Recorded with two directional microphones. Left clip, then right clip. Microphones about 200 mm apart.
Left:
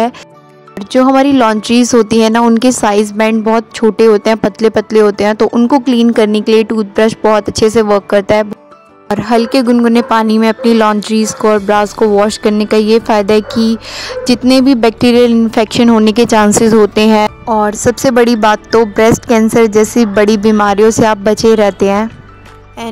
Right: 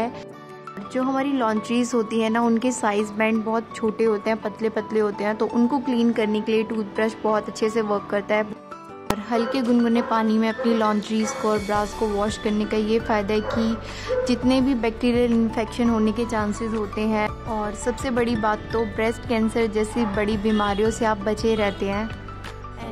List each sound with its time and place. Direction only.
0.9 s speech: 45° left (ahead or behind)